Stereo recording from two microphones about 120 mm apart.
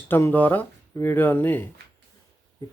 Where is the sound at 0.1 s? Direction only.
20° left (ahead or behind).